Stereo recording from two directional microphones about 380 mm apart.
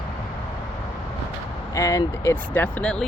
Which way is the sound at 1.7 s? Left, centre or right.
Centre.